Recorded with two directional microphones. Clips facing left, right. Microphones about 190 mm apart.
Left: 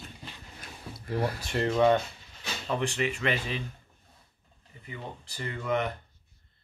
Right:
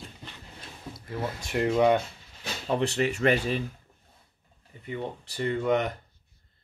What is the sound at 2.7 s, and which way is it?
Speech, 35° right (ahead or behind).